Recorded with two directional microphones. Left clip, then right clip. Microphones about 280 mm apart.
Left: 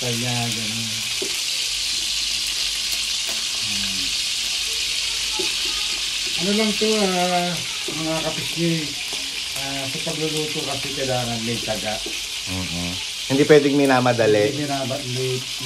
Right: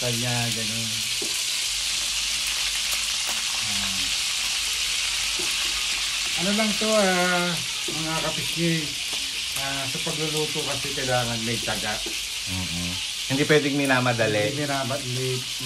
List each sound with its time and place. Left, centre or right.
13.4 s speech: left